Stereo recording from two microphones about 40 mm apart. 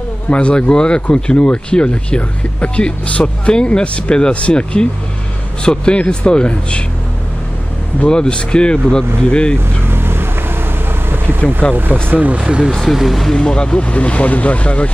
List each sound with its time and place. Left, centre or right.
0.3 s speech: left
8.1 s speech: left
9.8 s boat: right
11.1 s vehicle: right
11.7 s speech: right
12.9 s speech: centre
13.3 s speech: centre; by 14.9 s left